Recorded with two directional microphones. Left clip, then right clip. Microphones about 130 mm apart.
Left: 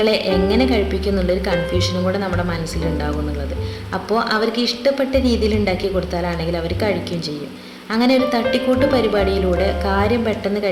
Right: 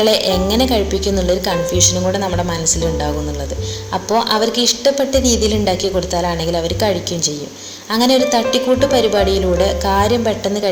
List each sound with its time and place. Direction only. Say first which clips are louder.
0.0 s a woman's voice: right 3 dB; 25° right (ahead or behind)
4.1 s a woman's voice: right 3 dB; 20° right (ahead or behind)